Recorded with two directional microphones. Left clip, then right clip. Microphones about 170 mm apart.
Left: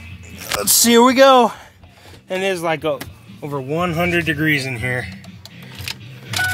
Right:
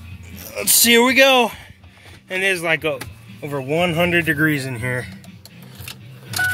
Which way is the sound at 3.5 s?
10° right (ahead or behind).